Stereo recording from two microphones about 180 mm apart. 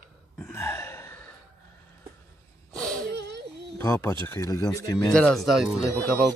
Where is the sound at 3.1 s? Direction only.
70° right (ahead or behind).